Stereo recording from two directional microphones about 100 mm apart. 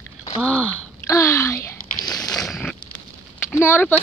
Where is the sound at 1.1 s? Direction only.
30° left (ahead or behind).